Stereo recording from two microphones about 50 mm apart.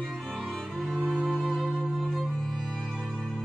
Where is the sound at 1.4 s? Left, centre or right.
Centre.